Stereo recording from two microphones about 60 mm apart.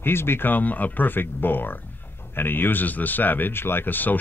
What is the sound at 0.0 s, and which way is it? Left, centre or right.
Speech, left.